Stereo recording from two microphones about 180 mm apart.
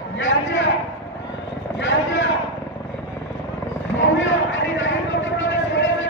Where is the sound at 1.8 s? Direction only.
85° left.